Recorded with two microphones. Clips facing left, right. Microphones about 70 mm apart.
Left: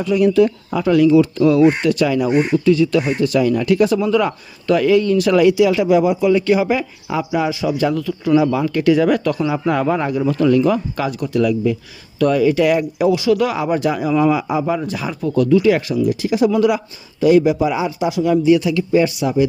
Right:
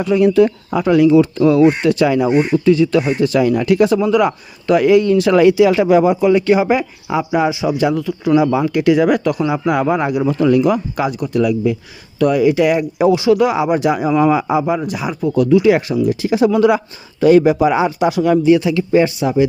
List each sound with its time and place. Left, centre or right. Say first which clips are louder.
0.0 s speech: right 2 dB; right
6.3 s speech: right 2 dB; right; by 12.8 s centre
13.0 s speech: right 6 dB; right
14.6 s speech: right 2 dB; centre
17.2 s speech: right 3 dB; right
18.5 s speech: right 2 dB; right